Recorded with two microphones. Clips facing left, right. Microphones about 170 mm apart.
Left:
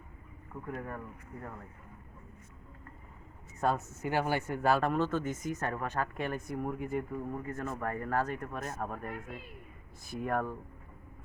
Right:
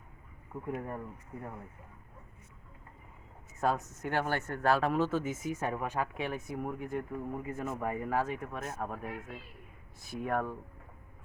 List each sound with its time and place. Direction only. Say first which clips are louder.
0.7 s speech: right 2 dB; 20° right (ahead or behind)
3.6 s speech: even; centre (ahead or behind)